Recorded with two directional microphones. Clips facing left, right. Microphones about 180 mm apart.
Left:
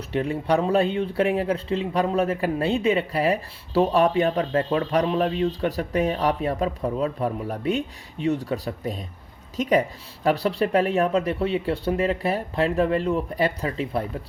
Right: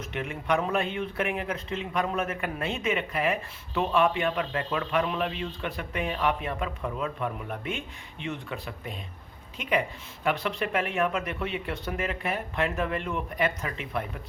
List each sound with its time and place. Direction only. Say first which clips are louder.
0.1 s speech: left 6 dB; 35° left (ahead or behind)